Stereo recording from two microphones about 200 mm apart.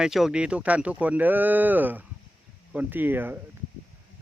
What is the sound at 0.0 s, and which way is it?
Speech, centre (ahead or behind).